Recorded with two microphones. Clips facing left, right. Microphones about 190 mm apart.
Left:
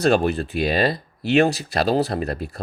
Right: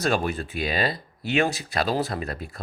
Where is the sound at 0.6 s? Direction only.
40° left (ahead or behind).